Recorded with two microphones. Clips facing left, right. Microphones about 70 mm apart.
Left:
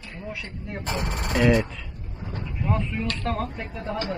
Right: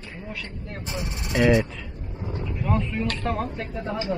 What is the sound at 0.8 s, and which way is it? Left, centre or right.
Speech, left.